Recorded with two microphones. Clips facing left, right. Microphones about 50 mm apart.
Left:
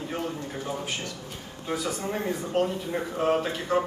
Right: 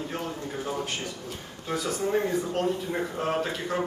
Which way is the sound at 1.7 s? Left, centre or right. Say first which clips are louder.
Right 2 dB; centre.